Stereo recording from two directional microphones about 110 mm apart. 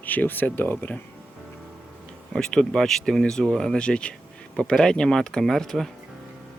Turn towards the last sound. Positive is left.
turn(degrees=5)  # may be behind; listen again after turning